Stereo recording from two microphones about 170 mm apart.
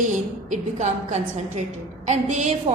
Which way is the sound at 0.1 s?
45° right (ahead or behind).